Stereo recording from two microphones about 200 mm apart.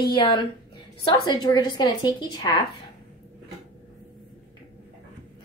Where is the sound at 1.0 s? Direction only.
20° left (ahead or behind).